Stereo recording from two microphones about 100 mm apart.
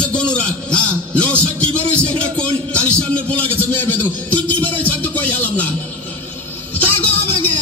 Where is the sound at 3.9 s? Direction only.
15° left (ahead or behind).